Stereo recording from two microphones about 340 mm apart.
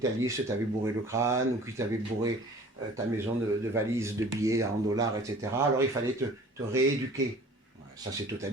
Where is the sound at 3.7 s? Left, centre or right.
Centre.